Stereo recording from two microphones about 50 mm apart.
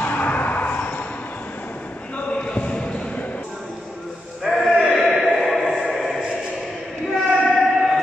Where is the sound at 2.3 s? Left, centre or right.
Left.